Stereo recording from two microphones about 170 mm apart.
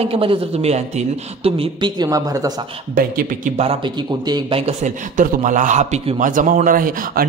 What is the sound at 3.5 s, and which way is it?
A man's voice, 35° right (ahead or behind).